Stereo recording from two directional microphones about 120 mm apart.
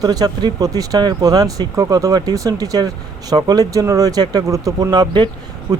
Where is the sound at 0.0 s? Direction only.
35° right (ahead or behind).